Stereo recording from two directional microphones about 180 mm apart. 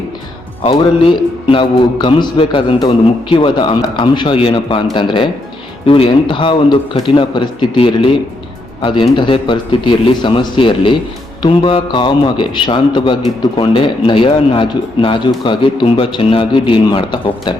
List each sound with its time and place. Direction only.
0.6 s a man's voice: 25° left (ahead or behind)